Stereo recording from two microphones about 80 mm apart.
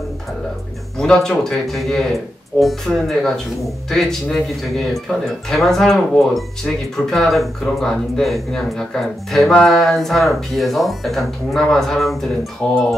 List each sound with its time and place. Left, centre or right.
0.9 s speech: centre
12.6 s speech: centre